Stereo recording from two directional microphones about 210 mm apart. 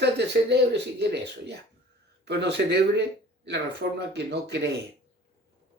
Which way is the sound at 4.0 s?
50° right (ahead or behind).